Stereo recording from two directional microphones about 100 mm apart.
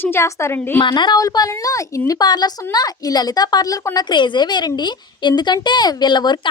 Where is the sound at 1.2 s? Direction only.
35° left (ahead or behind).